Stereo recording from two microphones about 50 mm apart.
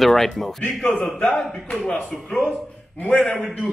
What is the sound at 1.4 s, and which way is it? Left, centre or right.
Speech, centre.